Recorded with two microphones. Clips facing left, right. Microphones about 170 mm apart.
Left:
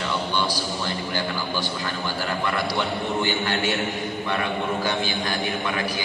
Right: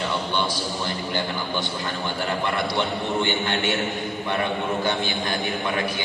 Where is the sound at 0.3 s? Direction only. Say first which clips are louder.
Left 1 dB; 25° right (ahead or behind).